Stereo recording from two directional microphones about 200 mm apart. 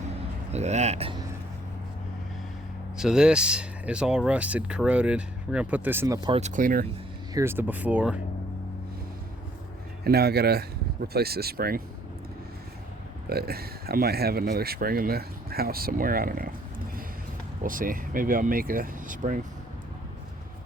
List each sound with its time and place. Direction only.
0.5 s speech: 35° right (ahead or behind)
3.0 s speech: 5° right (ahead or behind)
6.2 s speech: 30° right (ahead or behind)
7.3 s speech: 10° right (ahead or behind)
10.0 s speech: 50° right (ahead or behind)
13.3 s speech: 50° right (ahead or behind)